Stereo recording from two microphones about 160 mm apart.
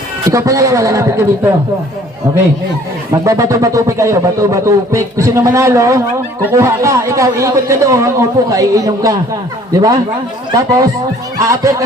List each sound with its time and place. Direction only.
0.3 s speech: 20° right (ahead or behind)
3.1 s speech: 20° right (ahead or behind)